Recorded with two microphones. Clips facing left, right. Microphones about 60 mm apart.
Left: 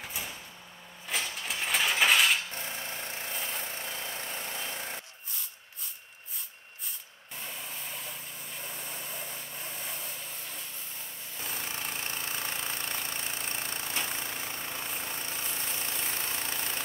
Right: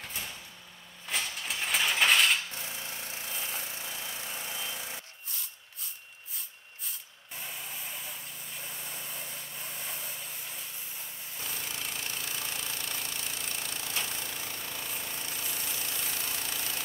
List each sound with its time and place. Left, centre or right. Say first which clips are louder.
0.0 s sliding door: left 1 dB; centre
1.0 s a sound: left 1 dB; centre
2.5 s a sound: left 2 dB; left
7.3 s spray: left 1 dB; centre
8.5 s vehicle: left 2 dB; centre
11.5 s engine: left 2 dB; left